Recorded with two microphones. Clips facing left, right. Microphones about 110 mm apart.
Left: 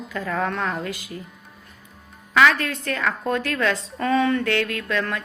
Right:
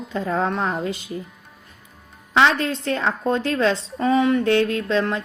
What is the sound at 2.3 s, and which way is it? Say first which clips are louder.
A woman's voice: right 1 dB; 25° right (ahead or behind).